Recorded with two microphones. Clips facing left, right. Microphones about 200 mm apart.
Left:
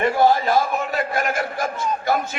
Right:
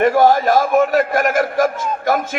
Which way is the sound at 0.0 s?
50° right (ahead or behind).